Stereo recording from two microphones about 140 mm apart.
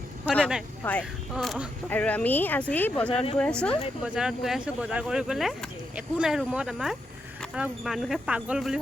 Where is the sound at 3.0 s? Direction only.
40° left (ahead or behind).